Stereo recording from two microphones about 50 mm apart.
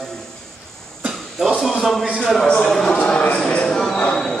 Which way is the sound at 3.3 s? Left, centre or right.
Centre.